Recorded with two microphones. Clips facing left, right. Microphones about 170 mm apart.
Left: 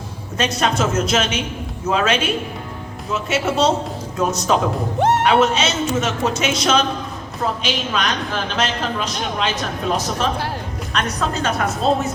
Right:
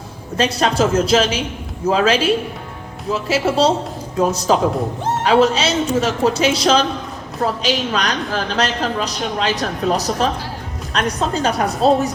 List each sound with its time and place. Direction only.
0.3 s a woman's voice: 30° right (ahead or behind)
4.9 s speech: 70° left (ahead or behind)
5.2 s a woman's voice: 30° right (ahead or behind)